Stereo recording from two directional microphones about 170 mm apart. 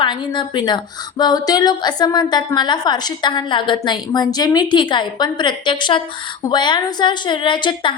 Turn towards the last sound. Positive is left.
turn(degrees=30)  # may be behind; listen again after turning